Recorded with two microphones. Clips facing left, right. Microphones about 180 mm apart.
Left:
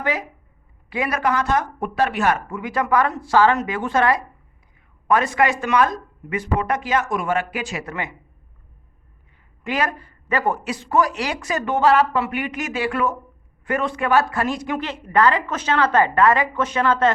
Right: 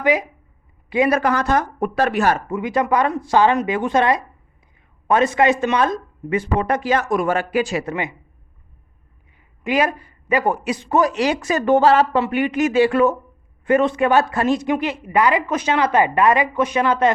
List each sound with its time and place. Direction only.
0.0 s a woman's voice: 15° right (ahead or behind)
1.2 s speech: 40° right (ahead or behind)
2.5 s a man's voice: 20° right (ahead or behind)
7.9 s a woman's voice: 15° right (ahead or behind)
9.6 s a man's voice: 15° right (ahead or behind)
15.0 s a woman's voice: 10° right (ahead or behind)